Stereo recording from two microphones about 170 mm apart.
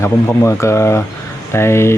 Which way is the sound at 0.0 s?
15° left (ahead or behind).